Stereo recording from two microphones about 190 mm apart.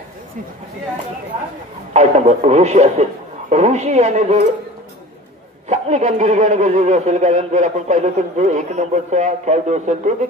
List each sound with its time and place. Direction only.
2.0 s speech: 35° right (ahead or behind)
5.7 s speech: 35° right (ahead or behind)